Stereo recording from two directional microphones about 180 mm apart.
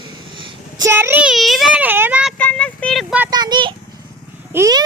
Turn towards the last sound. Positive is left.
turn(degrees=-15)  # may be behind; listen again after turning